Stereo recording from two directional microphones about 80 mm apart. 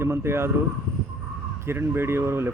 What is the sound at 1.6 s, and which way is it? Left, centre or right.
Speech, right.